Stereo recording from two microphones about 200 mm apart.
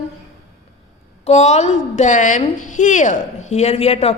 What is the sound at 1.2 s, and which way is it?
A woman's voice, 35° left (ahead or behind).